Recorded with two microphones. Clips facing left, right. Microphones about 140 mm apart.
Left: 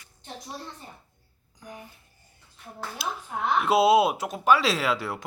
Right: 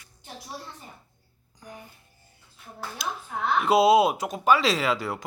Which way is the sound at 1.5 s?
Centre (ahead or behind).